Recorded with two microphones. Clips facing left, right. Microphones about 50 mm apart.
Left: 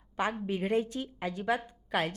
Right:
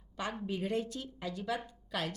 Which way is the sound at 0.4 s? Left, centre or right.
Left.